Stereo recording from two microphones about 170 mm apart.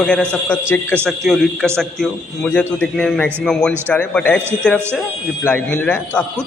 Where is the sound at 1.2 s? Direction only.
Centre (ahead or behind).